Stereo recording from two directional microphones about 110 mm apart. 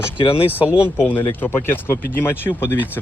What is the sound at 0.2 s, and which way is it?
Speech, 55° left (ahead or behind).